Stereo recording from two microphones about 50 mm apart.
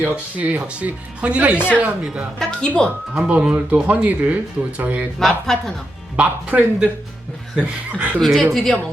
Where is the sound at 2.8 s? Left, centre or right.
Centre.